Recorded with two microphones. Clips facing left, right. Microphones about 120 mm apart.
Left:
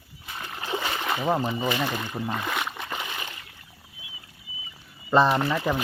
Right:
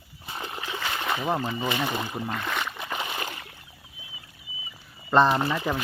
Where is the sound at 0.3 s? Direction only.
25° right (ahead or behind).